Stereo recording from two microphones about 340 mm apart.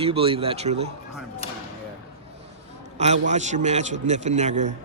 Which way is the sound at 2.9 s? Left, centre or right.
Centre.